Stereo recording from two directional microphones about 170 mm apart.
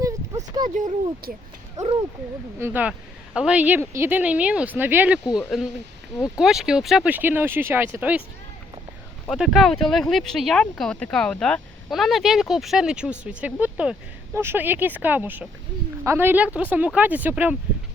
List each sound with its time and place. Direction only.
0.0 s a sound: 20° right (ahead or behind)
1.7 s speech: 20° right (ahead or behind); by 5.7 s 5° right (ahead or behind)
6.1 s speech: 20° left (ahead or behind)
6.4 s speech: centre (ahead or behind)
9.3 s speech: centre (ahead or behind)